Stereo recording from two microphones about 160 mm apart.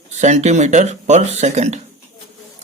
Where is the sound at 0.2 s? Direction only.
50° right (ahead or behind).